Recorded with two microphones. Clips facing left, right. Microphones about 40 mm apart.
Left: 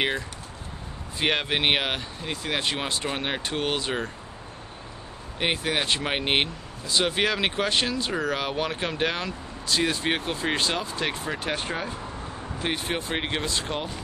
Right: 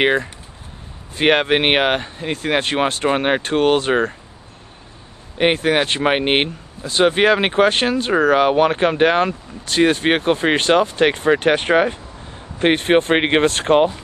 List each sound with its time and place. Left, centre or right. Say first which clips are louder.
0.0 s speech: right 10 dB; right
5.4 s speech: right 10 dB; right